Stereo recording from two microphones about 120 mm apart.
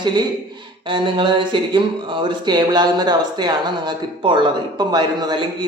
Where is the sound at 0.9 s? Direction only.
45° right (ahead or behind).